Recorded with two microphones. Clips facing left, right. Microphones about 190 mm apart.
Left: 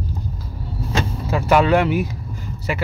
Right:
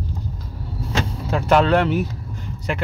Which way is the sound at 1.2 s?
5° left (ahead or behind).